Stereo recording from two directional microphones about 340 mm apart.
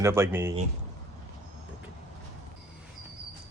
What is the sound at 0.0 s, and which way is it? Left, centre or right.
Speech, centre.